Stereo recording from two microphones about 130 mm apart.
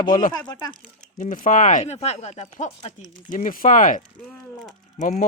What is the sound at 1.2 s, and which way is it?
Speech, 80° left.